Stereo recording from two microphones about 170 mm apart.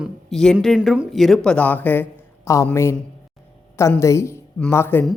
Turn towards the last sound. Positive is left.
turn(degrees=15)  # may be behind; listen again after turning